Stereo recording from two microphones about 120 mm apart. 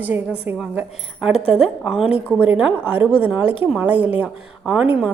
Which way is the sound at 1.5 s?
5° right (ahead or behind).